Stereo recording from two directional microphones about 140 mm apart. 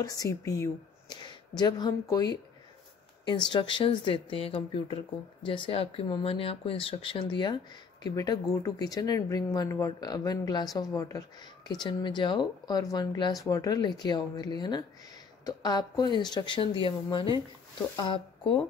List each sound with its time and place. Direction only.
0.0 s speech: 25° left (ahead or behind)
3.4 s speech: 35° left (ahead or behind)
18.4 s speech: 5° left (ahead or behind)